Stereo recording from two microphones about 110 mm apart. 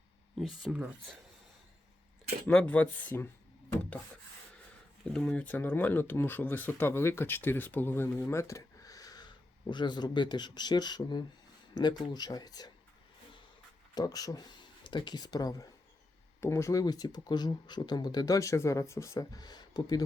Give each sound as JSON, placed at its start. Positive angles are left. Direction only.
{"t": 0.3, "sound": "speech", "side_deg": 0}
{"t": 2.5, "sound": "speech", "side_deg": 10}
{"t": 5.1, "sound": "speech", "side_deg": 10}
{"t": 13.9, "sound": "speech", "side_deg": 35}